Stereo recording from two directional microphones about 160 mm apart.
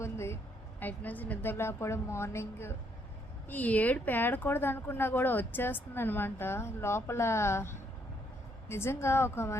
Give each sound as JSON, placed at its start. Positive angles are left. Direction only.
{"t": 0.0, "sound": "vehicle", "side_deg": 15}
{"t": 0.8, "sound": "speech", "side_deg": 10}